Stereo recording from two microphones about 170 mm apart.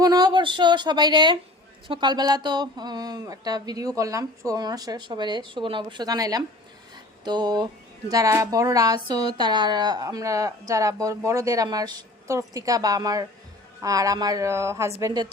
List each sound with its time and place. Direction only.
0.0 s speech: 25° right (ahead or behind)